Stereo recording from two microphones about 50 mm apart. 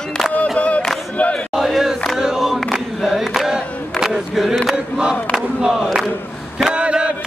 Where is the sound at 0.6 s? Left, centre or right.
Left.